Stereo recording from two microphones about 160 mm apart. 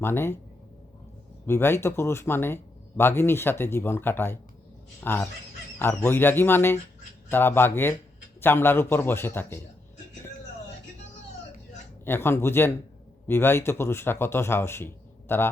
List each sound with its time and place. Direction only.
0.0 s speech: 15° left (ahead or behind)
1.5 s speech: 15° left (ahead or behind)
12.0 s speech: 15° left (ahead or behind)